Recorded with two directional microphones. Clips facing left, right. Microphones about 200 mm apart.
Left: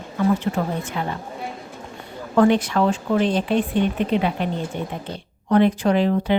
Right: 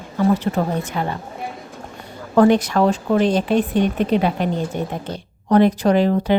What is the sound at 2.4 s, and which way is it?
A woman's voice, 40° right (ahead or behind).